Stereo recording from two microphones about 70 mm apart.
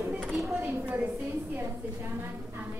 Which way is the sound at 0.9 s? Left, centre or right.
Right.